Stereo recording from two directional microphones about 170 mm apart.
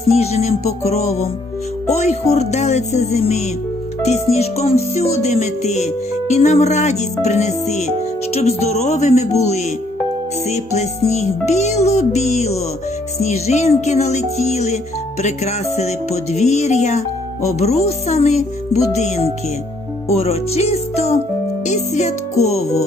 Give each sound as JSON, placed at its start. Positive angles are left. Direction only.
{"t": 0.1, "sound": "music", "side_deg": 40}